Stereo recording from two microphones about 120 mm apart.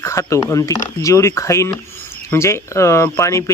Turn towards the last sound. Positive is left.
turn(degrees=25)  # may be behind; listen again after turning